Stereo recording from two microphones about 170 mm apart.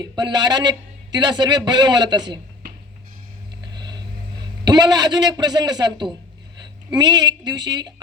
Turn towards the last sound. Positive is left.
turn(degrees=-25)  # may be behind; listen again after turning